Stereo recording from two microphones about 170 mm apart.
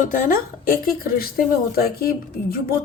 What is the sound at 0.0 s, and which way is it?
A woman's voice, 50° left (ahead or behind).